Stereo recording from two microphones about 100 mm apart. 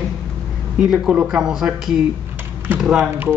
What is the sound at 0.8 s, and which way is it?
Speech, 5° right (ahead or behind).